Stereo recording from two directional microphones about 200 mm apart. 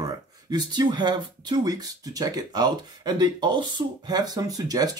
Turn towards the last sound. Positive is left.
turn(degrees=-20)  # may be behind; listen again after turning